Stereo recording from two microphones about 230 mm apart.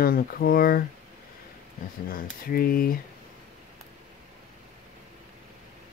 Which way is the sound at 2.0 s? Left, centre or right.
Left.